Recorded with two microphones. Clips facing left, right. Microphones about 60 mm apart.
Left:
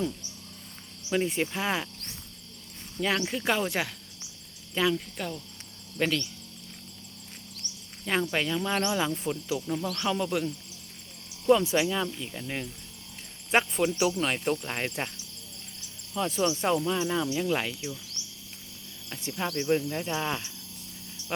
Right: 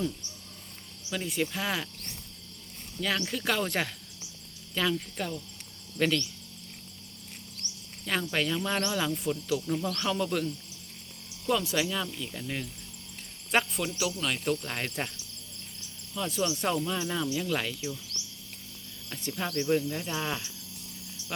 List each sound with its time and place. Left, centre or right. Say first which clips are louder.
1.1 s speech: left 4 dB; left
3.0 s speech: left 3 dB; centre
3.6 s cricket: left 1 dB; centre
4.7 s speech: left 3 dB; centre
6.0 s cricket: right 1 dB; centre
8.0 s cricket: left 2 dB; centre
11.4 s cricket: left 6 dB; left
13.5 s speech: left 3 dB; left
14.6 s cricket: left 2 dB; centre
16.1 s speech: left 4 dB; left
16.5 s cricket: left 3 dB; centre
19.1 s cricket: left 1 dB; centre